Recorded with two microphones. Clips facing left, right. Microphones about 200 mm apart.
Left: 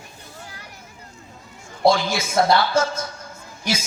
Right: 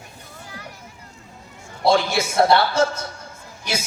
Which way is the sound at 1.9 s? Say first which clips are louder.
Right 2 dB; 65° right (ahead or behind).